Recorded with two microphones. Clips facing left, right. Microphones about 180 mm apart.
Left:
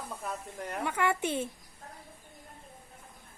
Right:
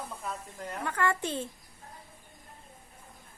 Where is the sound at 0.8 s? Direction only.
10° left (ahead or behind).